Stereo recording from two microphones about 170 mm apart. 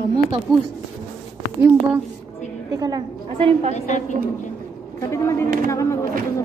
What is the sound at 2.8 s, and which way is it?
Speech, 25° right (ahead or behind).